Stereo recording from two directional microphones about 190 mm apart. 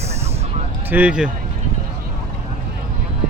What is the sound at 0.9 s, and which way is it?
Speech, 5° right (ahead or behind).